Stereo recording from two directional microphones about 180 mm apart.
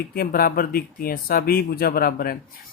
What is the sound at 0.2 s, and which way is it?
Speech, 55° left (ahead or behind).